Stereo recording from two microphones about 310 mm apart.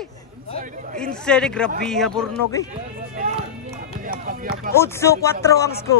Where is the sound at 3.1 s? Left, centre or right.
Right.